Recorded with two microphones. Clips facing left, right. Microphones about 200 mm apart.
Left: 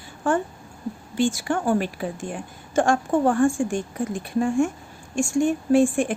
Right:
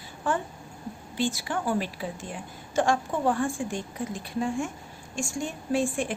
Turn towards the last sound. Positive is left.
turn(degrees=50)  # may be behind; listen again after turning